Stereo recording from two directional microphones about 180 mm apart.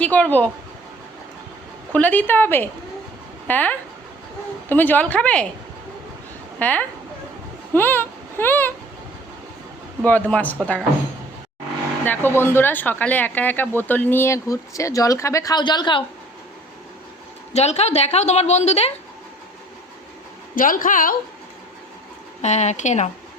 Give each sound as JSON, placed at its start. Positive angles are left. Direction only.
{"t": 0.0, "sound": "speech", "side_deg": 10}
{"t": 1.9, "sound": "speech", "side_deg": 10}
{"t": 6.6, "sound": "speech", "side_deg": 10}
{"t": 7.7, "sound": "a sound", "side_deg": 10}
{"t": 10.0, "sound": "speech", "side_deg": 10}
{"t": 12.0, "sound": "speech", "side_deg": 10}
{"t": 17.5, "sound": "a woman's voice", "side_deg": 35}
{"t": 20.6, "sound": "a woman's voice", "side_deg": 50}
{"t": 22.4, "sound": "a woman's voice", "side_deg": 40}